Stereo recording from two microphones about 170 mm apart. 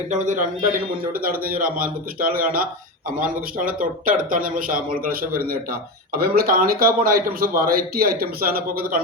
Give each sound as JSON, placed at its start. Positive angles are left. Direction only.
{"t": 0.1, "sound": "speech", "side_deg": -45}
{"t": 1.2, "sound": "a man's voice", "side_deg": -60}